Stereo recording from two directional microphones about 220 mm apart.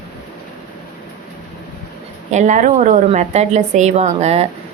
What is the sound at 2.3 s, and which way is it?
A woman's voice, 35° right (ahead or behind).